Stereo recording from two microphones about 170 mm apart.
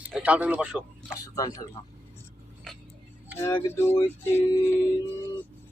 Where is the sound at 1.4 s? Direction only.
20° left (ahead or behind).